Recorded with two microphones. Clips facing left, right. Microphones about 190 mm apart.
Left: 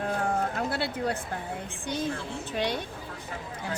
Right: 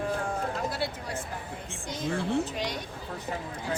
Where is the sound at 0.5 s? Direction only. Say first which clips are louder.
Left 2 dB; 60° left (ahead or behind).